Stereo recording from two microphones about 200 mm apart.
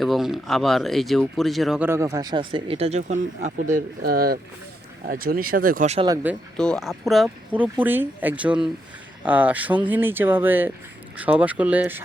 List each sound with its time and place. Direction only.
0.0 s speech: centre (ahead or behind); by 3.7 s 35° right (ahead or behind)
3.8 s speech: 50° right (ahead or behind)
6.6 s speech: 5° left (ahead or behind)